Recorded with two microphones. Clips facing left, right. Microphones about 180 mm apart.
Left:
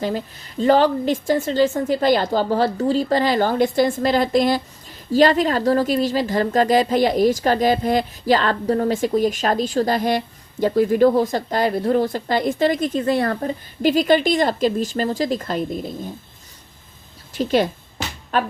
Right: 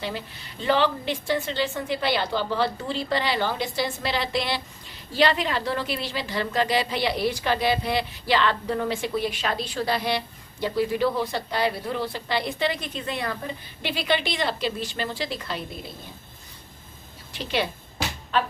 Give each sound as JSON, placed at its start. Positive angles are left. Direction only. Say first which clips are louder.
{"t": 0.0, "sound": "speech", "louder": "left 8 dB", "side_deg": 45}
{"t": 17.3, "sound": "speech", "louder": "left 9 dB", "side_deg": 45}